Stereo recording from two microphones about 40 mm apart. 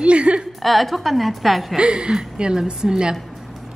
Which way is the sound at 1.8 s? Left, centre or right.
Right.